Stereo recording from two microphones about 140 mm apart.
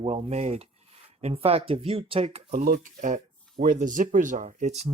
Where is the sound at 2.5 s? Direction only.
80° right.